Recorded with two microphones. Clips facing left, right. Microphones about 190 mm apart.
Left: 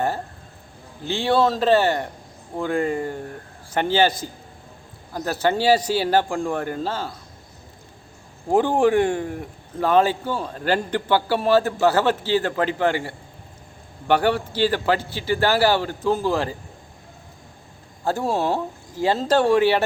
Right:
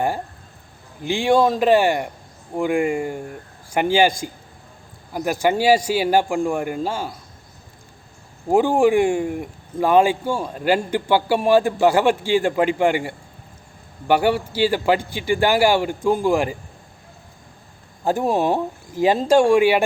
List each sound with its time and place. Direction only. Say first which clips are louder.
1.0 s speech: right 3 dB; 15° right (ahead or behind)
8.4 s speech: right 2 dB; 10° right (ahead or behind)
18.0 s speech: right 3 dB; 15° right (ahead or behind)